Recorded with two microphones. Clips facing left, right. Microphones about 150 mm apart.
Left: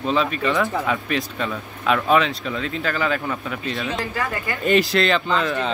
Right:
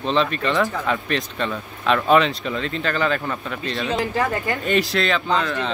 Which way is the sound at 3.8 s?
30° right (ahead or behind).